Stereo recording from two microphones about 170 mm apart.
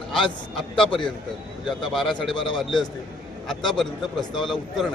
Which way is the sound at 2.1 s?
30° left (ahead or behind).